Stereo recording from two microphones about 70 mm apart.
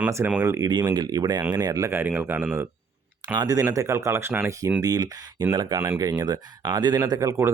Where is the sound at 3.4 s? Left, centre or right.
Right.